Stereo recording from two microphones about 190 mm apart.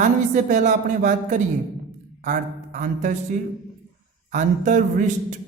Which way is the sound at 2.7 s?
40° right (ahead or behind).